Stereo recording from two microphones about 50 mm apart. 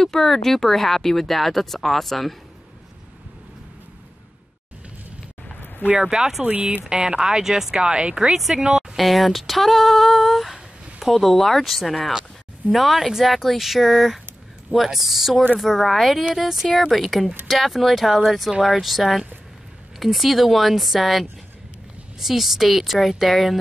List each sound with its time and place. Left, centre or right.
0.0 s speech: centre
5.9 s speech: centre
6.4 s speech: right
7.0 s speech: centre
8.3 s speech: centre
8.6 s a sound: centre
8.9 s speech: centre